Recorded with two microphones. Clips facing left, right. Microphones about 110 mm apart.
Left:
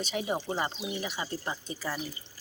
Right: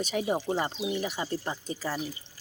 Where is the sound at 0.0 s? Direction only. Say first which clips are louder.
Right 3 dB; 40° right (ahead or behind).